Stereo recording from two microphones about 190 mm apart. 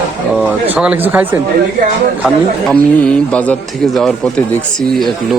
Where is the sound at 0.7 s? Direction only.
10° right (ahead or behind).